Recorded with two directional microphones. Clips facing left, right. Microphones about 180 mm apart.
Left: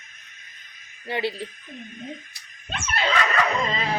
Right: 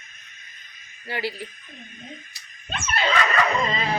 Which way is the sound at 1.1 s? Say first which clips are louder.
Left 3 dB; 25° left (ahead or behind).